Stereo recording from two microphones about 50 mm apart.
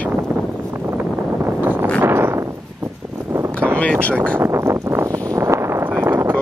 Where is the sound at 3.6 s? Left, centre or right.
Right.